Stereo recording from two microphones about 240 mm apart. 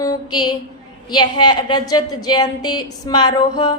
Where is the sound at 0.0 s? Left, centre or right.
Centre.